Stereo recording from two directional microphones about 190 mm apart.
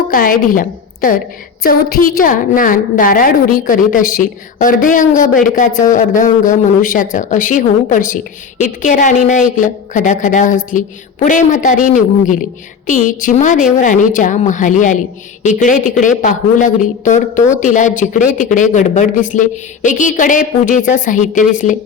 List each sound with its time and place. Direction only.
0.1 s a woman's voice: 45° left (ahead or behind)